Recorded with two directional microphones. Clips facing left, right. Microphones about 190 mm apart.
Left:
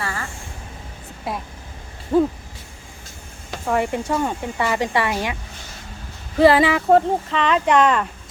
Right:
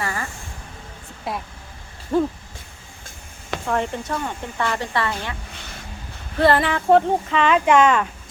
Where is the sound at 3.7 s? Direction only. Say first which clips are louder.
Left 3 dB; 10° left (ahead or behind).